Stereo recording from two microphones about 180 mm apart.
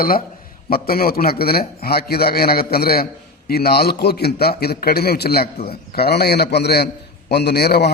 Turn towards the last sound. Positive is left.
turn(degrees=65)  # may be behind; listen again after turning